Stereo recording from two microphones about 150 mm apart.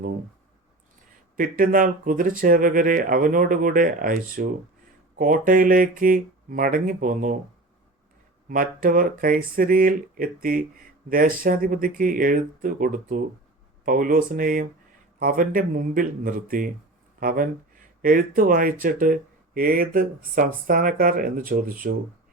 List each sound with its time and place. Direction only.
1.4 s speech: 65° right (ahead or behind)
8.4 s speech: 65° right (ahead or behind)